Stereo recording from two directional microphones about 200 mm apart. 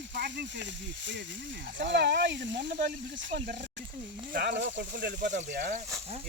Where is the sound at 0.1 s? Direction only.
60° right (ahead or behind).